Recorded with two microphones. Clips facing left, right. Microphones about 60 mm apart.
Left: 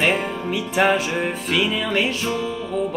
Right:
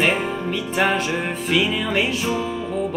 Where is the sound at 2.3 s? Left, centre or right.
Centre.